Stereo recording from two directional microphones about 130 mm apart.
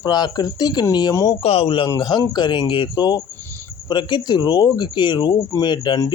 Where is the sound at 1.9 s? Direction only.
35° left (ahead or behind).